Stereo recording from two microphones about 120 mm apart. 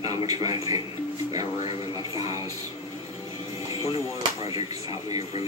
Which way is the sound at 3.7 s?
30° right (ahead or behind).